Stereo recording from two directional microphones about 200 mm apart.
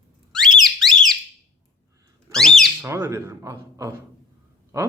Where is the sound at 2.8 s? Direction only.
10° right (ahead or behind).